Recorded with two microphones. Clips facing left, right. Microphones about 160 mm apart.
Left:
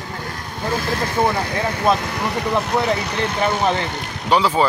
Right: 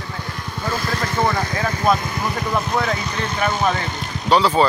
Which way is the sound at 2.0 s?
70° left (ahead or behind).